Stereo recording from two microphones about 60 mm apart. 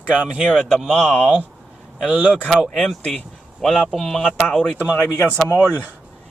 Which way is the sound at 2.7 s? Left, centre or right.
Centre.